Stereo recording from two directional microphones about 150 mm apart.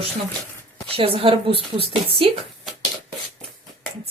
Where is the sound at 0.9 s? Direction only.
40° right (ahead or behind).